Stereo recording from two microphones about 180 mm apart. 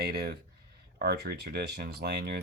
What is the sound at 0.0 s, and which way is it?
Speech, 65° right (ahead or behind).